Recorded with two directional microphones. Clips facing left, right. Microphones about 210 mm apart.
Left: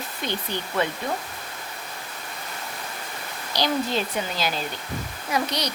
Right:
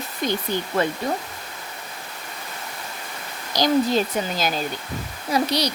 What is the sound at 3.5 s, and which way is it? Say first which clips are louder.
A woman's voice: right 5 dB; 45° right (ahead or behind).